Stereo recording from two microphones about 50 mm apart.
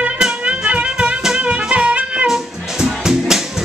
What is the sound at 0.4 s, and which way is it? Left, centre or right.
Music, right.